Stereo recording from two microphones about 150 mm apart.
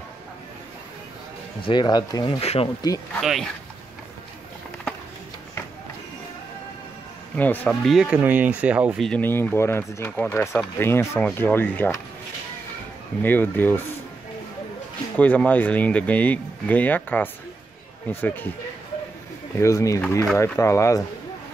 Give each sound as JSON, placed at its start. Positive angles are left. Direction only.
{"t": 1.7, "sound": "speech", "side_deg": 30}
{"t": 2.4, "sound": "speech", "side_deg": 45}
{"t": 3.2, "sound": "speech", "side_deg": 0}
{"t": 7.3, "sound": "speech", "side_deg": 10}
{"t": 8.9, "sound": "speech", "side_deg": 0}
{"t": 9.2, "sound": "speech", "side_deg": 15}
{"t": 13.2, "sound": "speech", "side_deg": 15}
{"t": 15.1, "sound": "speech", "side_deg": 10}
{"t": 19.6, "sound": "speech", "side_deg": 20}